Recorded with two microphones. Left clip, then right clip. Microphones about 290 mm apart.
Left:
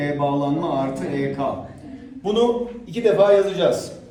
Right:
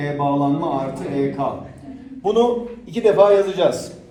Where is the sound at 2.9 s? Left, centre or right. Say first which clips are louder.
Right 2 dB; right.